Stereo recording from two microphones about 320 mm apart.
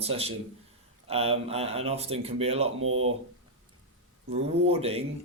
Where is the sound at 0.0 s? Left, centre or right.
Centre.